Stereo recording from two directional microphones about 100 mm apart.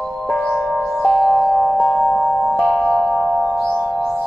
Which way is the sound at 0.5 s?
5° left (ahead or behind).